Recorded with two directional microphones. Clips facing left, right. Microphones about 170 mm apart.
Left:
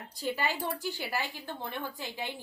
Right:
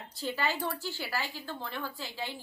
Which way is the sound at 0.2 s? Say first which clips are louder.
Even; 15° left (ahead or behind).